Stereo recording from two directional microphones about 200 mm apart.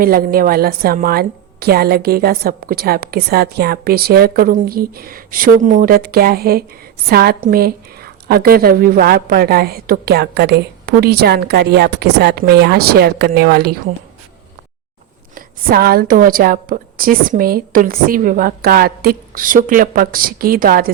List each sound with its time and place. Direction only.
0.0 s a woman's voice: 45° right (ahead or behind)
15.4 s a woman's voice: 50° right (ahead or behind)